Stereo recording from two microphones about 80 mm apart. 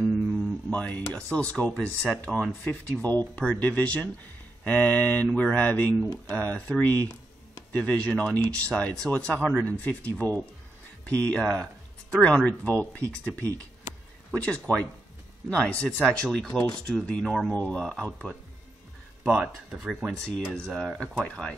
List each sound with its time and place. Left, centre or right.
0.7 s speech: centre
14.3 s speech: centre
19.3 s speech: centre
20.1 s speech: centre